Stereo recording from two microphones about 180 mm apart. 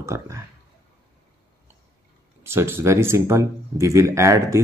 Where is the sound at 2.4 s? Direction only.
15° right (ahead or behind).